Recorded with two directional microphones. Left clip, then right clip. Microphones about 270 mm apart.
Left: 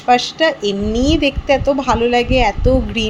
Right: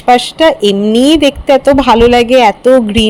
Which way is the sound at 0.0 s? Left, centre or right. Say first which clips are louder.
Right 6 dB; right.